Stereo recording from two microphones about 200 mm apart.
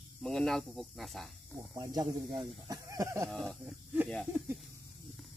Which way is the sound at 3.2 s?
Centre (ahead or behind).